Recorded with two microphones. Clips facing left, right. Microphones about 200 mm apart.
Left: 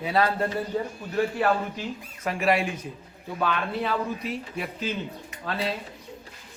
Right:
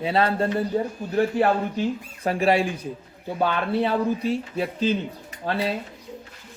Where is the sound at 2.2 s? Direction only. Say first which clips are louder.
Right 3 dB; 35° right (ahead or behind).